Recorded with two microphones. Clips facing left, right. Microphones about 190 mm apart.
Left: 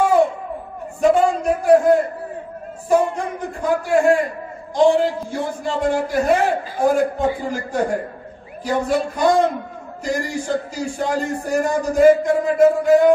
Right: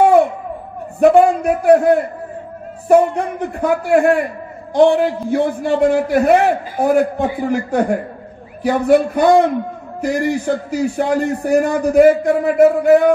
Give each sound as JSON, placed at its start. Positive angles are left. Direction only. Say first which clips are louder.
{"t": 0.9, "sound": "a man's voice", "louder": "right 5 dB", "side_deg": -60}